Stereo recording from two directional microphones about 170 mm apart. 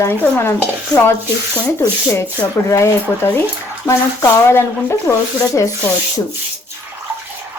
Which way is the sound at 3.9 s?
15° left (ahead or behind).